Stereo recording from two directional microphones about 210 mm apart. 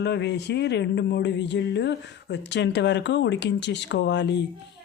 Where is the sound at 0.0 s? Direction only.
55° left (ahead or behind).